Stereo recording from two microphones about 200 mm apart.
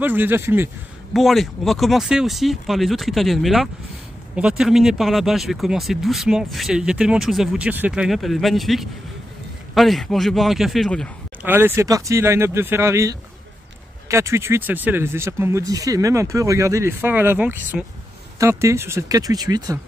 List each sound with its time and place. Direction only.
0.0 s speech: 10° right (ahead or behind)
1.1 s speech: centre (ahead or behind)
11.4 s speech: 10° right (ahead or behind)